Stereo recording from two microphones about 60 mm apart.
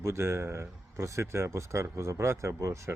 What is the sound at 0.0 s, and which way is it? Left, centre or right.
Speech, right.